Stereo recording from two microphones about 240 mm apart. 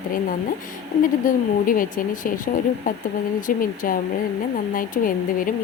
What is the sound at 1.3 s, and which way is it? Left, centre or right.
Speech, left.